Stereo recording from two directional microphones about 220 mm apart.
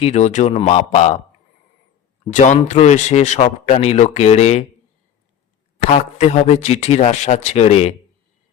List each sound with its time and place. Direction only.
0.0 s a man's voice: 30° left (ahead or behind)
2.2 s a man's voice: 30° left (ahead or behind)
5.9 s a man's voice: 30° left (ahead or behind)